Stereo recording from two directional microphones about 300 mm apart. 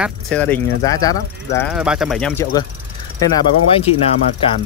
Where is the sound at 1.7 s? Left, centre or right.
Centre.